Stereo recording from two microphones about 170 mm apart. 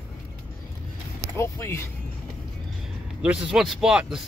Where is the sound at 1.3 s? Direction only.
15° left (ahead or behind).